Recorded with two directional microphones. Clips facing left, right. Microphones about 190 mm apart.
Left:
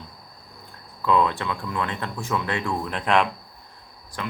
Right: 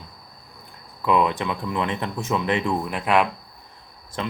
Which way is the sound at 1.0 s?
15° right (ahead or behind).